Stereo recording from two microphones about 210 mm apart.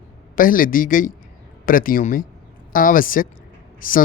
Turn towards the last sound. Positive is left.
turn(degrees=40)  # may be behind; listen again after turning